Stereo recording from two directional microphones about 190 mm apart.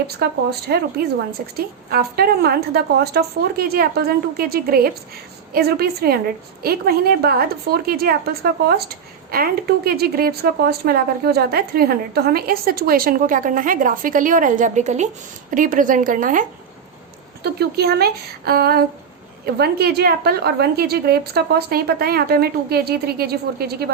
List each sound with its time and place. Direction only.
0.2 s a woman's voice: 55° right (ahead or behind)
17.4 s a woman's voice: 55° right (ahead or behind)